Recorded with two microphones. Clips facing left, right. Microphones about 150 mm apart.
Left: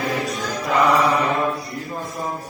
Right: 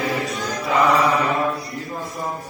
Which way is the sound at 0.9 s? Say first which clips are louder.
Even; 30° left (ahead or behind).